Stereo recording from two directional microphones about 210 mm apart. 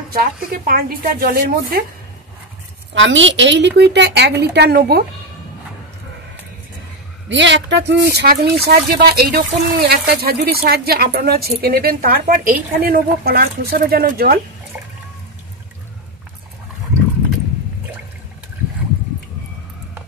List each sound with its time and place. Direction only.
0.1 s speech: 45° right (ahead or behind)
2.9 s speech: 60° right (ahead or behind)
7.2 s speech: 60° right (ahead or behind)